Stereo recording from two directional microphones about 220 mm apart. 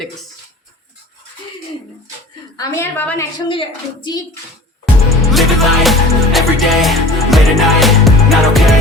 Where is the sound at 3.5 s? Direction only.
25° left (ahead or behind).